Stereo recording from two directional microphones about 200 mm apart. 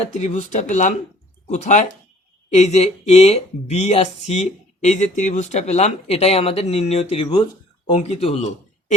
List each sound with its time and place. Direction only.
0.1 s speech: 35° left (ahead or behind)